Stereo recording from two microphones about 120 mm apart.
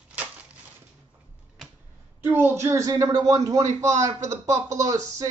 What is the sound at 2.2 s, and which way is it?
Speech, 20° right (ahead or behind).